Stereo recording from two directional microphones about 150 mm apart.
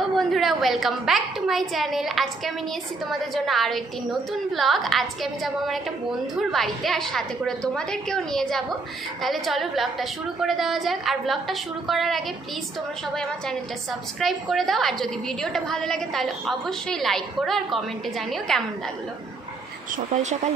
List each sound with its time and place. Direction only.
0.1 s a woman's voice: centre (ahead or behind)
20.1 s speech: 50° right (ahead or behind)